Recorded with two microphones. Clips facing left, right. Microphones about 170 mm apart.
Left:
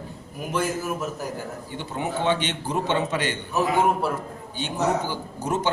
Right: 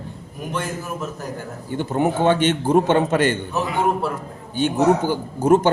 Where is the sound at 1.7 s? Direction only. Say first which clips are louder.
Right 11 dB; 50° right (ahead or behind).